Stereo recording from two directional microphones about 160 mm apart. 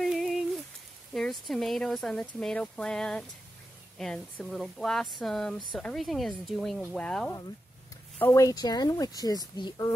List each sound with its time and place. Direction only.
0.0 s a sound: centre (ahead or behind)
1.1 s speech: centre (ahead or behind)
8.2 s speech: 20° left (ahead or behind)